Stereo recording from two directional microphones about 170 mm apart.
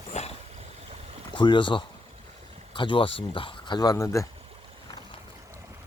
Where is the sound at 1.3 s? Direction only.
30° left (ahead or behind).